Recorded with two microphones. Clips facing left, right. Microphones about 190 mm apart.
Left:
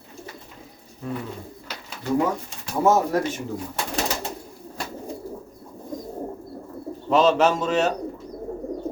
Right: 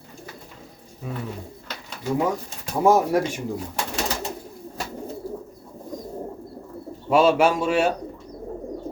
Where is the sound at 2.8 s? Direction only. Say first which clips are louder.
Right 1 dB; 10° right (ahead or behind).